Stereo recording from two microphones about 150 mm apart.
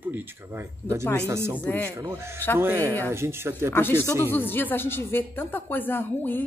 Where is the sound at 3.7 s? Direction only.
15° left (ahead or behind).